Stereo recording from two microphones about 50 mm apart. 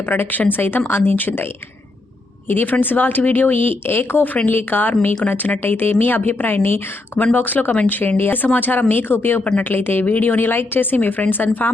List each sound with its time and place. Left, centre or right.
0.0 s a woman's voice: left
2.5 s a woman's voice: left